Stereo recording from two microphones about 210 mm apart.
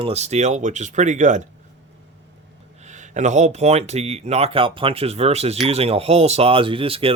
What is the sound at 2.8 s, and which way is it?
Speech, 35° right (ahead or behind).